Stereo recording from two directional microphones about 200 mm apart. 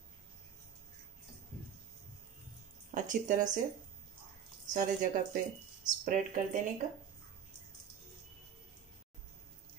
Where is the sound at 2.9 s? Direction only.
40° right (ahead or behind).